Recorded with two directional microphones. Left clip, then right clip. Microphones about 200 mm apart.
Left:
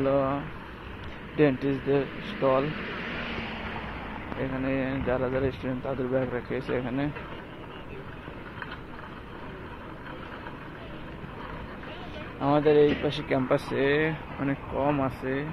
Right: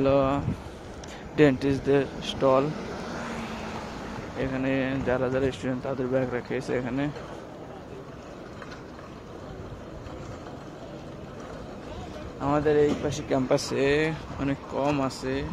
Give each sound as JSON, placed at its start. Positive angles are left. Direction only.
{"t": 0.0, "sound": "speech", "side_deg": -25}
{"t": 4.4, "sound": "speech", "side_deg": -20}
{"t": 12.4, "sound": "speech", "side_deg": 5}
{"t": 13.3, "sound": "speech", "side_deg": -15}